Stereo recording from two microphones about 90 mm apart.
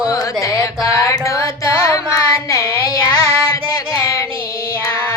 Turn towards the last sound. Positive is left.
turn(degrees=30)  # may be behind; listen again after turning